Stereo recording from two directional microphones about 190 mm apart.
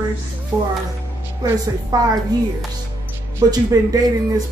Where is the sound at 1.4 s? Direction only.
20° right (ahead or behind).